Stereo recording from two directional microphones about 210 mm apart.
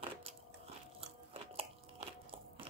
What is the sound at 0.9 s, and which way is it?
Biting, 25° right (ahead or behind).